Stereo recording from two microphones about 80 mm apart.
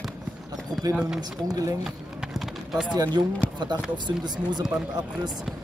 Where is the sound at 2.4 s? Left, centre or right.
Centre.